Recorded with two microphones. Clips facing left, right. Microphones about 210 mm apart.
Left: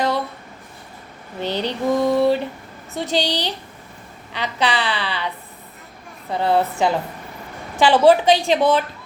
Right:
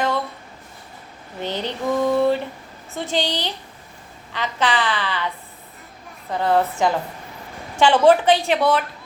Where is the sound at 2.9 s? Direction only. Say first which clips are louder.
Left 2 dB; 40° left (ahead or behind).